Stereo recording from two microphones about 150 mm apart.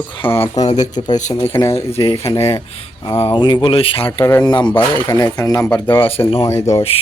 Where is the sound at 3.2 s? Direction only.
30° left (ahead or behind).